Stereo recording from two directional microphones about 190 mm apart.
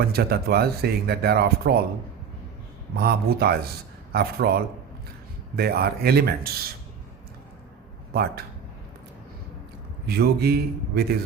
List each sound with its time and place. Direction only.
0.1 s speech: 55° right (ahead or behind)
2.9 s speech: 55° right (ahead or behind)
10.1 s speech: 55° right (ahead or behind)